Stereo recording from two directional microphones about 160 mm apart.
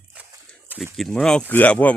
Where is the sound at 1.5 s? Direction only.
10° left (ahead or behind).